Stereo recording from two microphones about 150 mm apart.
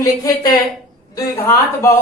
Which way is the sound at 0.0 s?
25° left (ahead or behind).